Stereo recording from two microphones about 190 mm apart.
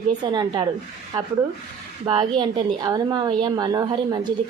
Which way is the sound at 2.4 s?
20° right (ahead or behind).